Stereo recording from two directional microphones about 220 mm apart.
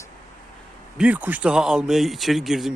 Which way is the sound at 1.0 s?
5° right (ahead or behind).